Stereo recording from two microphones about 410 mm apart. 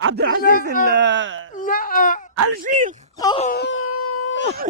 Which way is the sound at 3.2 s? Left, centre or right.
Centre.